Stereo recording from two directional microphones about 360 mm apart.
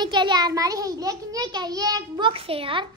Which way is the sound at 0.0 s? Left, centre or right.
Centre.